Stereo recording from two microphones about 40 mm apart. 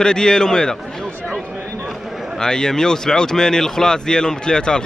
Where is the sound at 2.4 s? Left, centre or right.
Centre.